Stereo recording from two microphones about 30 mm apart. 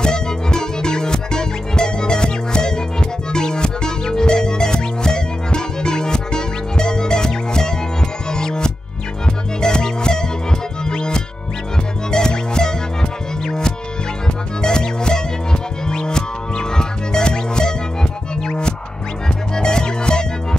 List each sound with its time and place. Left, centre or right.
0.0 s music: left